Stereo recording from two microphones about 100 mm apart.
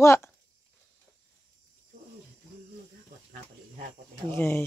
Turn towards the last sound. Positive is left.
turn(degrees=25)  # may be behind; listen again after turning